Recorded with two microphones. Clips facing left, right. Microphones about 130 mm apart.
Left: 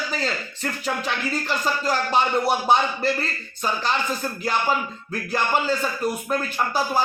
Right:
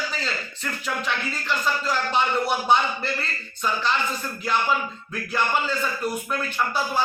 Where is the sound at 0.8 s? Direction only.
35° left (ahead or behind).